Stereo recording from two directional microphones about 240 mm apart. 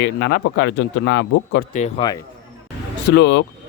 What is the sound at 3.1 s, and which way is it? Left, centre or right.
Speech, left.